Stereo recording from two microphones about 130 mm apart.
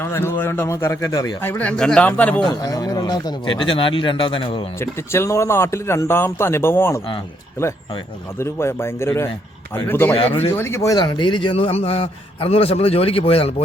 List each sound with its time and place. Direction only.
0.0 s speech: 20° left (ahead or behind)
1.4 s speech: 15° left (ahead or behind)
2.5 s speech: 30° left (ahead or behind)
4.8 s speech: 20° left (ahead or behind)
8.4 s a man's voice: 20° left (ahead or behind); by 13.5 s 45° left (ahead or behind)